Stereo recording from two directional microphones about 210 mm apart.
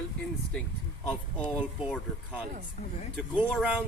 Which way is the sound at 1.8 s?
5° right (ahead or behind).